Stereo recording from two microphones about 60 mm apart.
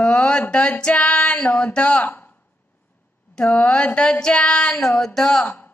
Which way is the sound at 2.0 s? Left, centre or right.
Left.